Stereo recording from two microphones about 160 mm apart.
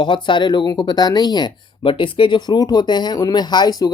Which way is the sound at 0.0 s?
30° left (ahead or behind).